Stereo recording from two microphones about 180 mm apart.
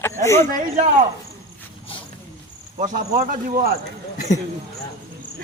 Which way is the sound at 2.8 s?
50° right (ahead or behind).